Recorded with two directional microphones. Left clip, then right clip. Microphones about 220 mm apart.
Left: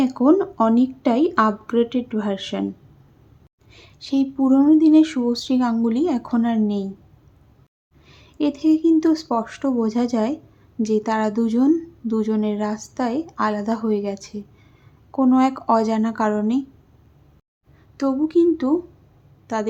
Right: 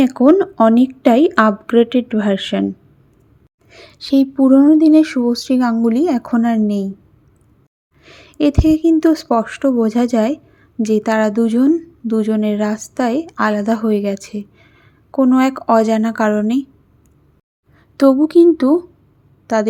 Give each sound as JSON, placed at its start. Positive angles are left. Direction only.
{"t": 0.0, "sound": "a woman's voice", "side_deg": -25}
{"t": 3.7, "sound": "a woman's voice", "side_deg": -25}
{"t": 8.0, "sound": "a woman's voice", "side_deg": -20}
{"t": 17.9, "sound": "a woman's voice", "side_deg": -30}